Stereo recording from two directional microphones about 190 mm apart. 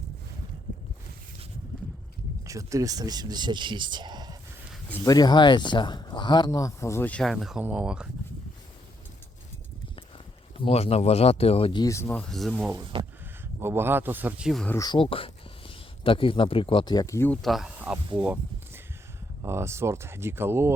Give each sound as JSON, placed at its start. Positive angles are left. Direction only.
{"t": 2.4, "sound": "speech", "side_deg": -15}
{"t": 4.9, "sound": "speech", "side_deg": 15}
{"t": 10.6, "sound": "speech", "side_deg": 30}
{"t": 12.0, "sound": "speech", "side_deg": 5}
{"t": 12.9, "sound": "speech", "side_deg": -30}
{"t": 13.4, "sound": "speech", "side_deg": -10}
{"t": 14.8, "sound": "speech", "side_deg": 25}
{"t": 18.2, "sound": "a sound", "side_deg": -10}
{"t": 19.4, "sound": "speech", "side_deg": -15}